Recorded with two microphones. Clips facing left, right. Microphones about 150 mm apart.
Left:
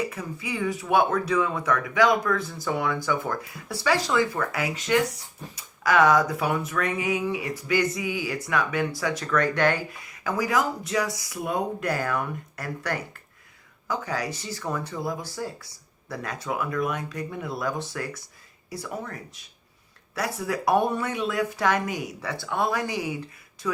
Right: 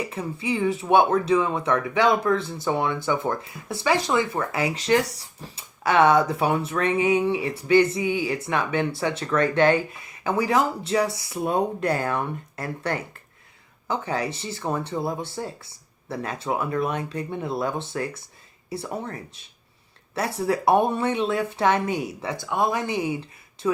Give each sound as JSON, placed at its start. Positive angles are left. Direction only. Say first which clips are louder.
{"t": 0.1, "sound": "speech", "louder": "right 5 dB", "side_deg": -25}